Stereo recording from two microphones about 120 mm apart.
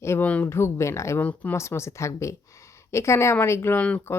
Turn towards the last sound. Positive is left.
turn(degrees=15)  # may be behind; listen again after turning